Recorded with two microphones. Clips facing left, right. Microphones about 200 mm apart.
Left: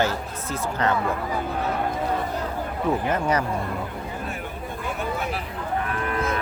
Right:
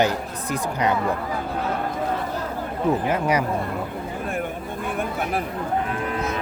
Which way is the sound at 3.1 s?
10° right (ahead or behind).